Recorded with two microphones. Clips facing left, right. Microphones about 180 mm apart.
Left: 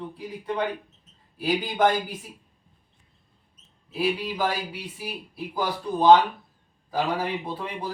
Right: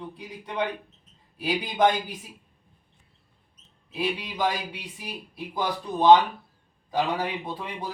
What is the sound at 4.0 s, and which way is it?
Speech, 5° left (ahead or behind).